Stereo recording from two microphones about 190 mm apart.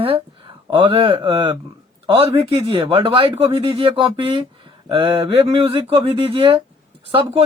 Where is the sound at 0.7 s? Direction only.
30° right (ahead or behind).